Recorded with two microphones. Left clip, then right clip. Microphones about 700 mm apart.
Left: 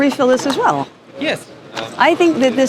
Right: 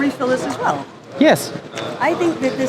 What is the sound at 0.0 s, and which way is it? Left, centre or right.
Speech, left.